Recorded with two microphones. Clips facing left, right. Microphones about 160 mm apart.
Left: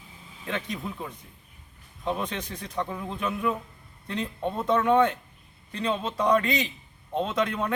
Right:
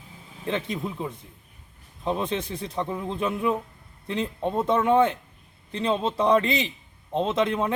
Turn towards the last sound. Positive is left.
turn(degrees=-25)  # may be behind; listen again after turning